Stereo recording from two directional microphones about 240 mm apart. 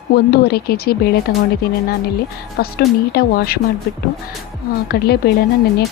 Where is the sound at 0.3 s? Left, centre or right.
Left.